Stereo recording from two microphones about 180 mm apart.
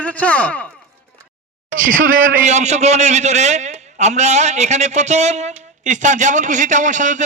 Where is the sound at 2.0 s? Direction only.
50° right (ahead or behind).